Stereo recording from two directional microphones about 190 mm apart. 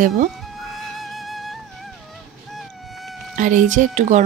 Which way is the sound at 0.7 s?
Centre (ahead or behind).